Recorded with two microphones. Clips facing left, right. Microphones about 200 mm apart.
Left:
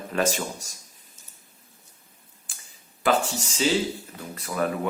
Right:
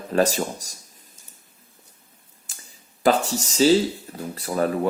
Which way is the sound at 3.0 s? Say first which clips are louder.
Right 3 dB; 40° right (ahead or behind).